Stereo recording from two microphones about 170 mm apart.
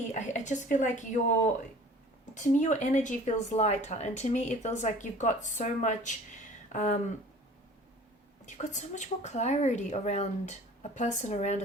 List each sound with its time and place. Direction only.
0.1 s a woman's voice: 45° left (ahead or behind)
2.3 s a woman's voice: 45° left (ahead or behind)
8.4 s a woman's voice: 45° left (ahead or behind)